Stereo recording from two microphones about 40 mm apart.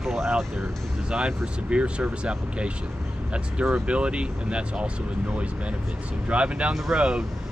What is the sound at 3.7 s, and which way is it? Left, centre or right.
Speech, right.